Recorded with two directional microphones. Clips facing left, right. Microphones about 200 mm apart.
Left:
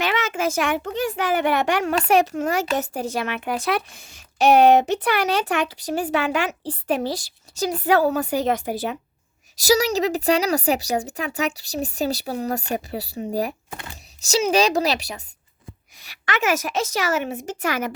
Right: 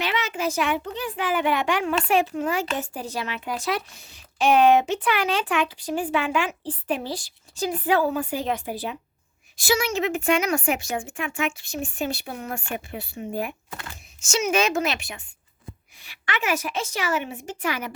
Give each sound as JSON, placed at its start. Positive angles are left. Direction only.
{"t": 0.0, "sound": "a sound", "side_deg": 45}
{"t": 1.2, "sound": "a child's voice", "side_deg": 65}
{"t": 1.8, "sound": "a woman's voice", "side_deg": 40}
{"t": 2.5, "sound": "a child's voice", "side_deg": 75}
{"t": 3.1, "sound": "a woman's voice", "side_deg": 60}
{"t": 4.5, "sound": "a woman's voice", "side_deg": 40}
{"t": 13.7, "sound": "a sound", "side_deg": 20}
{"t": 14.2, "sound": "a woman's voice", "side_deg": 35}